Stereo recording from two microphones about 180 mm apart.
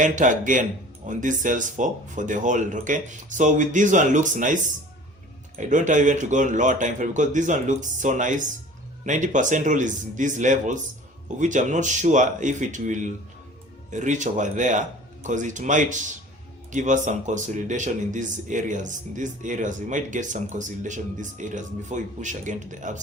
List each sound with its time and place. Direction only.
0.0 s speech: 45° right (ahead or behind)